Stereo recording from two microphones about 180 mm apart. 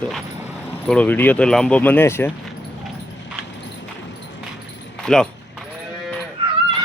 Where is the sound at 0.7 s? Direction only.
10° left (ahead or behind).